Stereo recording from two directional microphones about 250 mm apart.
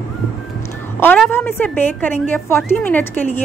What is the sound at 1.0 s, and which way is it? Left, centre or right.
A woman's voice, centre.